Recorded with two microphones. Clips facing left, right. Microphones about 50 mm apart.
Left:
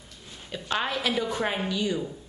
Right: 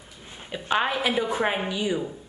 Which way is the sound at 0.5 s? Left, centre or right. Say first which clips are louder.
Right 4 dB; centre.